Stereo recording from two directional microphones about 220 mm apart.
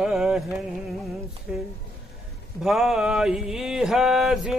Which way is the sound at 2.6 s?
Centre (ahead or behind).